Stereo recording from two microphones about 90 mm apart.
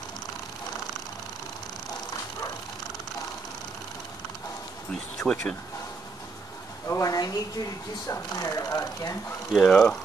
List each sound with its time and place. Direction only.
5.2 s speech: 10° left (ahead or behind)
6.9 s speech: 40° left (ahead or behind)
9.5 s speech: centre (ahead or behind)